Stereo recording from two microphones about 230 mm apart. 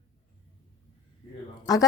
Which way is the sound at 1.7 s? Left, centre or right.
Centre.